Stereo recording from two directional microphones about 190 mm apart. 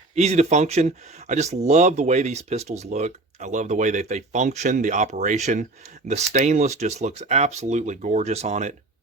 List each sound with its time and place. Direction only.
0.2 s speech: 35° right (ahead or behind)